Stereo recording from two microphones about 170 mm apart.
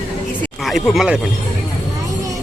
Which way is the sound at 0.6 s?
Centre (ahead or behind).